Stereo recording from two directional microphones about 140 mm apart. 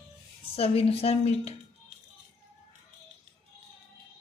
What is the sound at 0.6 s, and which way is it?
Speech, 45° left (ahead or behind).